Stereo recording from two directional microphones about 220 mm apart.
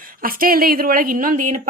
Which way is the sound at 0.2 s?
40° right (ahead or behind).